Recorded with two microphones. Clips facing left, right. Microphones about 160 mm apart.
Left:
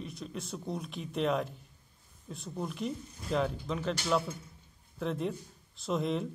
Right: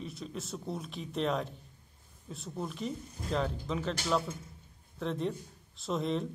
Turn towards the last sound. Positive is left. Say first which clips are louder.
# left 1 dB
turn(degrees=0)  # may be behind; listen again after turning